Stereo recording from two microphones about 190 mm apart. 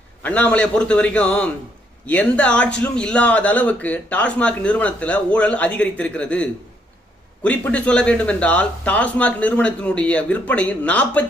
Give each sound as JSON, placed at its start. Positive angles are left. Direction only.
{"t": 0.2, "sound": "speech", "side_deg": 10}